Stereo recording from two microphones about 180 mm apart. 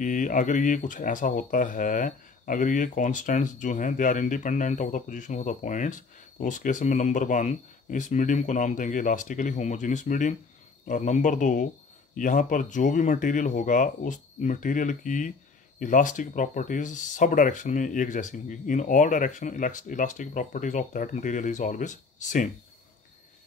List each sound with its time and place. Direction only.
0.0 s speech: 45° left (ahead or behind)